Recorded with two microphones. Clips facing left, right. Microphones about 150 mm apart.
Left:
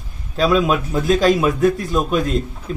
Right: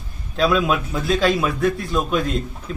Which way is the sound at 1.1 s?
40° left (ahead or behind).